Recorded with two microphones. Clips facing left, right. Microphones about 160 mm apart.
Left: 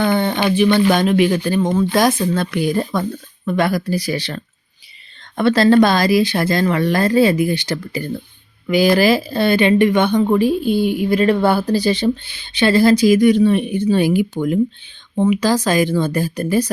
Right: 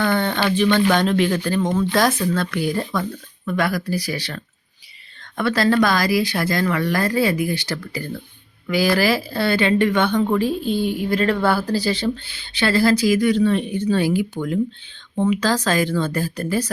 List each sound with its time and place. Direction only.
0.0 s speech: 15° left (ahead or behind)
5.4 s speech: 25° left (ahead or behind)